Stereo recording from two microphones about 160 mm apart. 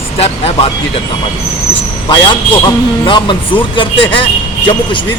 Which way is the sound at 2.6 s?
30° left (ahead or behind).